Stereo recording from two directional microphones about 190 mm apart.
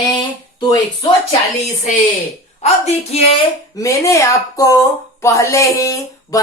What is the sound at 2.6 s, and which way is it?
Speech, 35° left (ahead or behind).